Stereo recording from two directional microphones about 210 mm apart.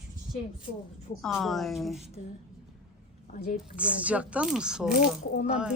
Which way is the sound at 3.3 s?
45° left (ahead or behind).